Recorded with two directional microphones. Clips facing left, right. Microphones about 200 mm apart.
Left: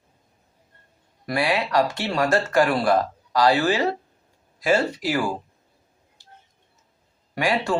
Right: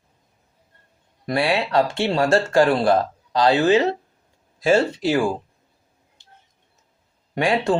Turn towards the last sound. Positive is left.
turn(degrees=-25)  # may be behind; listen again after turning